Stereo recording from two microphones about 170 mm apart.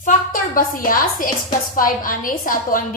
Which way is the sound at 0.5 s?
55° left (ahead or behind).